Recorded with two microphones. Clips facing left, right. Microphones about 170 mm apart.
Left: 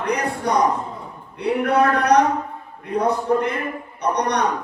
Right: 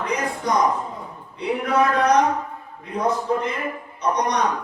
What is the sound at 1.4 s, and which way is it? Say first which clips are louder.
Speech: left 2 dB; 60° left (ahead or behind).